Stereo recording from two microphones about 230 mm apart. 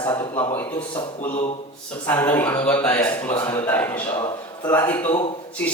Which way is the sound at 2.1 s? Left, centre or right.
Centre.